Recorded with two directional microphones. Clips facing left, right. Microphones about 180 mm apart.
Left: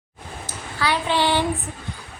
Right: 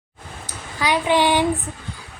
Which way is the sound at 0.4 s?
15° right (ahead or behind).